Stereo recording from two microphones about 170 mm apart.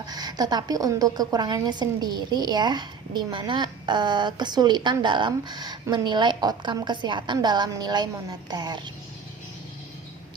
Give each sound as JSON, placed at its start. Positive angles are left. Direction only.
{"t": 0.0, "sound": "a woman's voice", "side_deg": -25}